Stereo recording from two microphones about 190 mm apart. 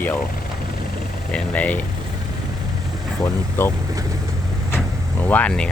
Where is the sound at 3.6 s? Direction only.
10° left (ahead or behind).